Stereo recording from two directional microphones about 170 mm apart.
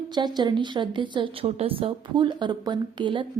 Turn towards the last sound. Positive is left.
turn(degrees=-30)  # may be behind; listen again after turning